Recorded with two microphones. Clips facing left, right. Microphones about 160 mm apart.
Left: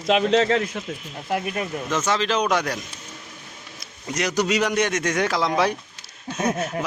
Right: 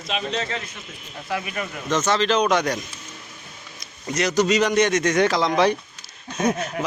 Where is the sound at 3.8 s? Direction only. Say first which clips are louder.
Right 2 dB; 10° left (ahead or behind).